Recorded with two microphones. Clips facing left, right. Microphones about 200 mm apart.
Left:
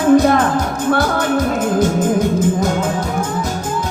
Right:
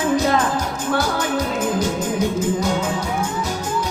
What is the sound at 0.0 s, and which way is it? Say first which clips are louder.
Music: left 7 dB; 55° left (ahead or behind).